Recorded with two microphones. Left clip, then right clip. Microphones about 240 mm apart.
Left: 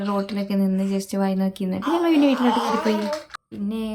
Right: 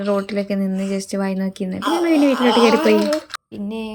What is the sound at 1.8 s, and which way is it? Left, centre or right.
Speech, right.